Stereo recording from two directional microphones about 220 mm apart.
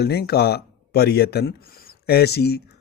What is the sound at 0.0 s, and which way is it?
Speech, 45° left (ahead or behind).